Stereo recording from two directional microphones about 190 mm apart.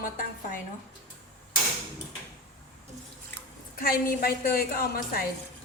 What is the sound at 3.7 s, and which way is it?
A woman's voice, 50° left (ahead or behind).